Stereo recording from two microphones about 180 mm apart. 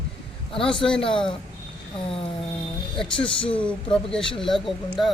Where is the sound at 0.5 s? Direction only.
30° left (ahead or behind).